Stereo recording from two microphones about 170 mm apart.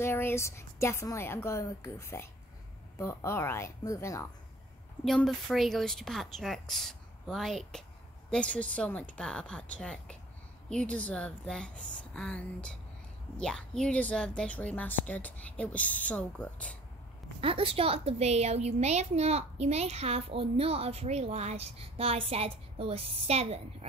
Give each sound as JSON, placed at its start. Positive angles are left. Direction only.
{"t": 0.0, "sound": "a woman's voice", "side_deg": 15}
{"t": 5.0, "sound": "a woman's voice", "side_deg": 0}
{"t": 17.4, "sound": "a woman's voice", "side_deg": -35}